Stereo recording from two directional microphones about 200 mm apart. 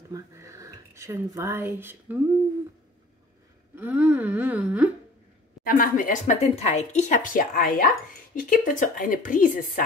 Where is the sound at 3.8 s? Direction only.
10° right (ahead or behind).